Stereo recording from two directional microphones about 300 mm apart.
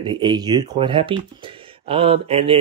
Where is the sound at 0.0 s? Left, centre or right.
Centre.